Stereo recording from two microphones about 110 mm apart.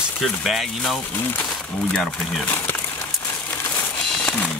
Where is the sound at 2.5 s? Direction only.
20° left (ahead or behind).